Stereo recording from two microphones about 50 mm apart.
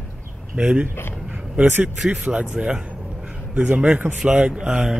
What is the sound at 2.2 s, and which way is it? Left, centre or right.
Speech, right.